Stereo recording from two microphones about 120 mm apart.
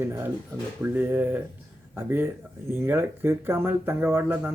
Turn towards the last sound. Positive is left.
turn(degrees=-15)  # may be behind; listen again after turning